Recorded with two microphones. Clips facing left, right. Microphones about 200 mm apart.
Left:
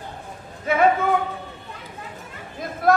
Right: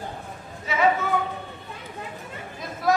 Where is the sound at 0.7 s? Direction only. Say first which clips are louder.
Left 6 dB; 55° left (ahead or behind).